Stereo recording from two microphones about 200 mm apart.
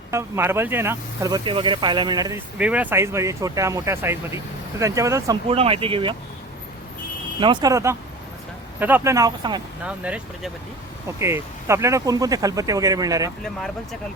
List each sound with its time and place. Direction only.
0.1 s speech: 15° right (ahead or behind)
2.6 s speech: 5° right (ahead or behind)
5.5 s speech: 30° right (ahead or behind)
7.3 s speech: 25° right (ahead or behind)
9.8 s speech: 5° right (ahead or behind)